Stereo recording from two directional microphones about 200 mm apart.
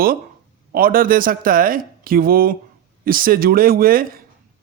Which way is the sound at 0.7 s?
45° right (ahead or behind).